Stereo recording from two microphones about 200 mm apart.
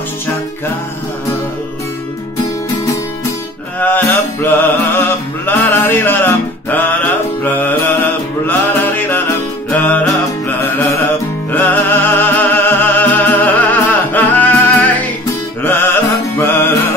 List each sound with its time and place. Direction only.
3.8 s music: 10° left (ahead or behind)
11.5 s music: 10° left (ahead or behind)